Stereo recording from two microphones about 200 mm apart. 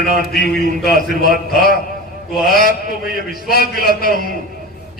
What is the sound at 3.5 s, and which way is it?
Speech, 50° left (ahead or behind).